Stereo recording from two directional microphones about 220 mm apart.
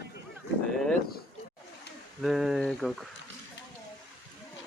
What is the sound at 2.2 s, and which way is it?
Speech, centre (ahead or behind).